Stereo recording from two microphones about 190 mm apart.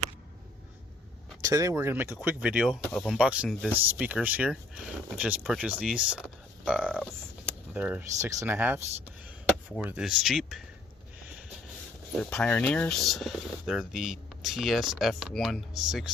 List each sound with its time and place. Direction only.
1.4 s speech: 20° right (ahead or behind)
2.9 s speech: 5° left (ahead or behind)
3.2 s speech: 5° right (ahead or behind)
7.7 s speech: 5° right (ahead or behind)
12.2 s speech: 5° left (ahead or behind)